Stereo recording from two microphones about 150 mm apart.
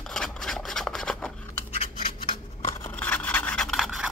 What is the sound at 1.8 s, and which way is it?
Scissors, 45° left (ahead or behind).